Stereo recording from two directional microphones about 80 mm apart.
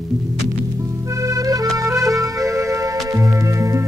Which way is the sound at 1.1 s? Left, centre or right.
Right.